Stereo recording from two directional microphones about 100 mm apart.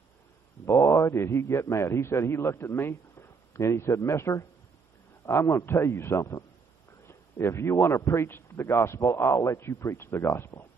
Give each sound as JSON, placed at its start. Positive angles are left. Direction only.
{"t": 0.9, "sound": "a man's voice", "side_deg": 25}